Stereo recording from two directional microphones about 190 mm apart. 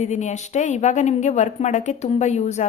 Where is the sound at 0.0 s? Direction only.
40° left (ahead or behind).